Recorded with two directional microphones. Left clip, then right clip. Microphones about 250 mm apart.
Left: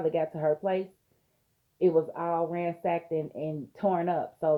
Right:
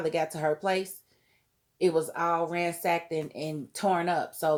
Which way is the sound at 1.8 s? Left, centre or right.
Centre.